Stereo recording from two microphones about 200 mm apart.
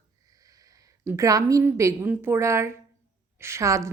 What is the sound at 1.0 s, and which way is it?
A woman's voice, 15° right (ahead or behind).